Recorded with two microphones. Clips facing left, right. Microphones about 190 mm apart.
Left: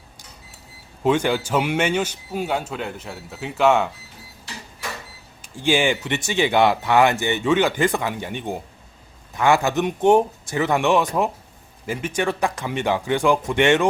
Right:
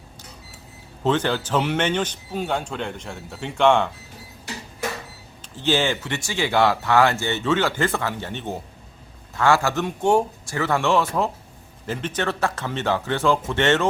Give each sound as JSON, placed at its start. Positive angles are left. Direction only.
{"t": 1.0, "sound": "speech", "side_deg": 10}
{"t": 5.4, "sound": "speech", "side_deg": 10}